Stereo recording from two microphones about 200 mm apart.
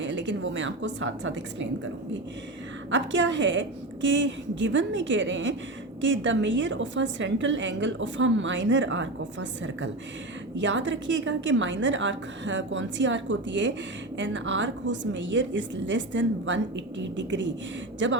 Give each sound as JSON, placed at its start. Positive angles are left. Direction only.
{"t": 0.0, "sound": "a woman's voice", "side_deg": -65}
{"t": 2.9, "sound": "a woman's voice", "side_deg": -65}